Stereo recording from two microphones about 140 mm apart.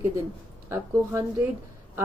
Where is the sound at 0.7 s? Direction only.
20° right (ahead or behind).